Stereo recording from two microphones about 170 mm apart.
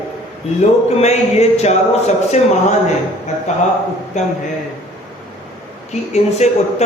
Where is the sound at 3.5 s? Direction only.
45° left (ahead or behind).